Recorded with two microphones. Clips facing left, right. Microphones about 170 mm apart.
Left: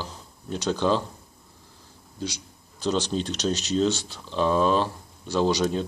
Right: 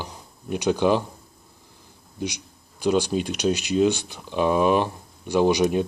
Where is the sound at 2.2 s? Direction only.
15° right (ahead or behind).